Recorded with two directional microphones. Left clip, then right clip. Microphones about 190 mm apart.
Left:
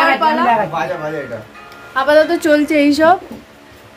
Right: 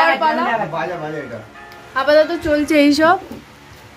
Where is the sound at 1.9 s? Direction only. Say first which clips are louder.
Left 2 dB; 5° right (ahead or behind).